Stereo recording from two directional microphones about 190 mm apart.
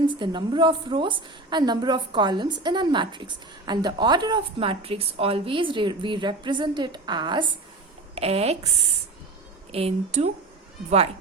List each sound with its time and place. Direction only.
0.1 s a woman's voice: 25° right (ahead or behind)
9.7 s a woman's voice: 35° right (ahead or behind)